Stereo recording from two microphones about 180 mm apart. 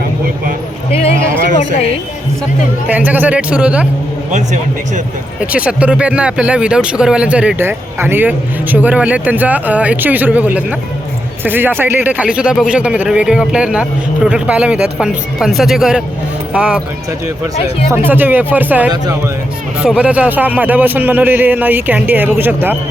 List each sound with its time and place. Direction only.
0.9 s speech: 35° left (ahead or behind)
2.9 s speech: 10° right (ahead or behind)
4.3 s speech: 45° right (ahead or behind)
5.4 s speech: 5° right (ahead or behind)
17.9 s speech: 10° right (ahead or behind)